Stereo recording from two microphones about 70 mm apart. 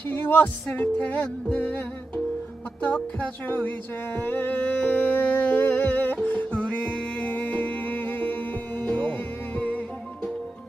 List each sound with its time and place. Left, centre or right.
0.1 s music: left